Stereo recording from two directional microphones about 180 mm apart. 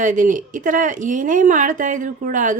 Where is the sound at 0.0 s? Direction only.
45° right (ahead or behind).